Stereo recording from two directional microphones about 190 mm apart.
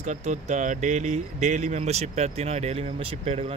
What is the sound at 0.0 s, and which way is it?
Speech, 40° right (ahead or behind).